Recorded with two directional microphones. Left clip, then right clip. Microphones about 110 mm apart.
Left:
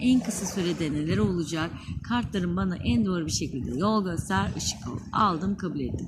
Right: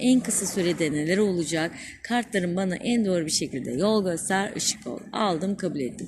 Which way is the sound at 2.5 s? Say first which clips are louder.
Right 3 dB; 45° left (ahead or behind).